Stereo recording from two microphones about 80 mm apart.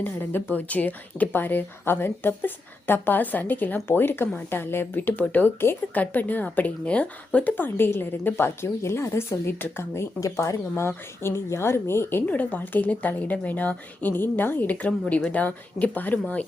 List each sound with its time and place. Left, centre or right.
0.0 s a woman's voice: left